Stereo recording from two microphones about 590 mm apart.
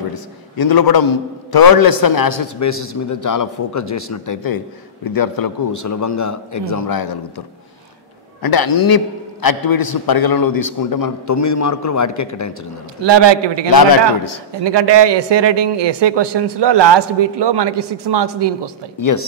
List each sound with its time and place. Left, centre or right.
0.1 s a man's voice: left
13.0 s a man's voice: right
13.7 s a man's voice: left
14.6 s a man's voice: right
18.9 s a man's voice: left